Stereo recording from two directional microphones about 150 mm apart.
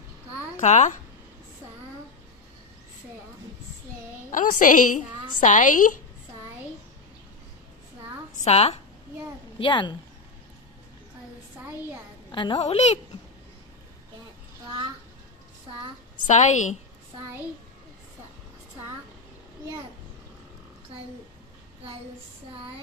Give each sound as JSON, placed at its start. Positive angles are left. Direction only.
{"t": 0.6, "sound": "a woman's voice", "side_deg": 50}
{"t": 4.3, "sound": "a woman's voice", "side_deg": 65}
{"t": 8.4, "sound": "a woman's voice", "side_deg": 45}
{"t": 9.6, "sound": "a woman's voice", "side_deg": 30}
{"t": 12.3, "sound": "a woman's voice", "side_deg": 30}
{"t": 12.5, "sound": "a woman's voice", "side_deg": 45}
{"t": 16.3, "sound": "a woman's voice", "side_deg": 55}